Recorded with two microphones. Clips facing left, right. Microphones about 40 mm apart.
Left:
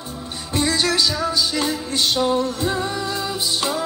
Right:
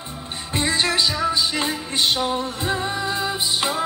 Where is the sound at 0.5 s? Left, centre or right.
Right.